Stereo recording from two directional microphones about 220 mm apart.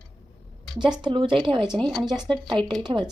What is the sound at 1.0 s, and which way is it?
Speech, 20° right (ahead or behind).